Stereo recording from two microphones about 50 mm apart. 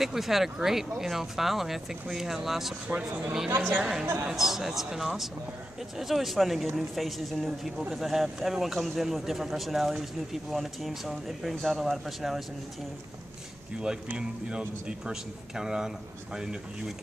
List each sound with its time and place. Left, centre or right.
0.0 s speech: centre
3.7 s speech: centre
4.0 s a woman's voice: right
4.3 s speech: centre
14.1 s speech: centre